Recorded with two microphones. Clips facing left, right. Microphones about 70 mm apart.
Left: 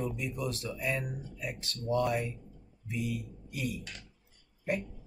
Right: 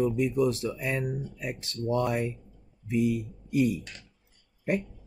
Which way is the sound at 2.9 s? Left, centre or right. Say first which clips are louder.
Right 9 dB; right.